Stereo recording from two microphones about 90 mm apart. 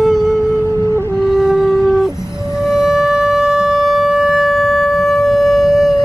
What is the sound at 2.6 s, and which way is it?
Wind instrument, 5° right (ahead or behind).